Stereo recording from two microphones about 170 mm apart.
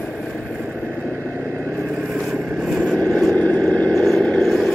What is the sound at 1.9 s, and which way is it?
Vehicle, centre (ahead or behind).